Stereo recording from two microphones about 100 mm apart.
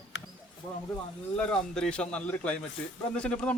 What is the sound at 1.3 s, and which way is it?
Speech, 10° left (ahead or behind).